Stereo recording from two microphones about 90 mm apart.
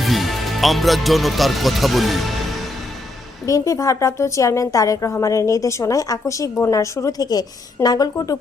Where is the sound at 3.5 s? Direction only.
40° left (ahead or behind).